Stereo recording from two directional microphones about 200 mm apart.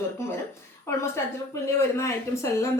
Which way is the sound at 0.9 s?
15° left (ahead or behind).